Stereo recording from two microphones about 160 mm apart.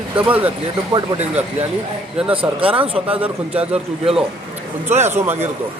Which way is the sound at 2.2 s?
5° right (ahead or behind).